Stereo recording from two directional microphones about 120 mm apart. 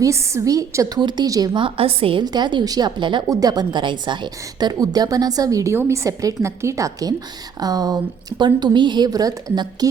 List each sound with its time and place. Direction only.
0.0 s a woman's voice: 25° right (ahead or behind)
1.6 s a woman's voice: 50° right (ahead or behind)
2.2 s a woman's voice: 35° right (ahead or behind)